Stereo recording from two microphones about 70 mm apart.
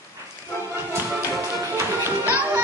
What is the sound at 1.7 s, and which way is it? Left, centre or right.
Music, right.